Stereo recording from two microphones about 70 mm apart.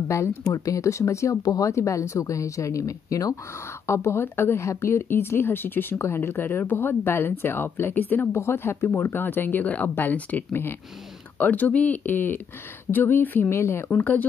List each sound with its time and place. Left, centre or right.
0.1 s speech: left
3.8 s speech: left
13.8 s speech: left